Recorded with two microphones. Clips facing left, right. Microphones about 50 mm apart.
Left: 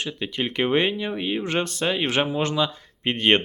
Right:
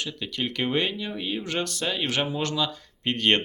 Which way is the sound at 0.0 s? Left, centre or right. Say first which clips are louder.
Left 3 dB; left.